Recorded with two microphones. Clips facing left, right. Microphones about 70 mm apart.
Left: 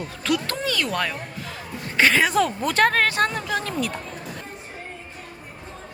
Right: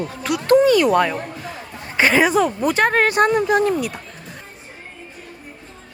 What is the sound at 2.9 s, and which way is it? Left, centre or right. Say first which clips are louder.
Speech: right 6 dB; centre.